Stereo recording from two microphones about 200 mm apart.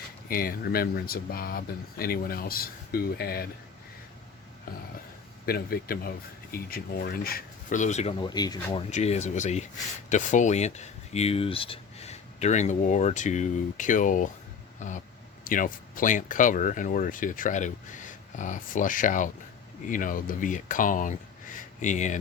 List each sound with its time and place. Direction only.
0.3 s speech: 45° left (ahead or behind)
5.5 s speech: 50° left (ahead or behind); by 8.8 s 20° left (ahead or behind)
8.9 s speech: 35° left (ahead or behind)
14.8 s vehicle: 40° left (ahead or behind)
15.4 s speech: 45° left (ahead or behind)